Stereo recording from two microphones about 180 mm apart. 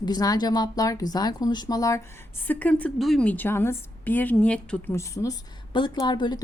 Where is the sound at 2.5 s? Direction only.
10° left (ahead or behind).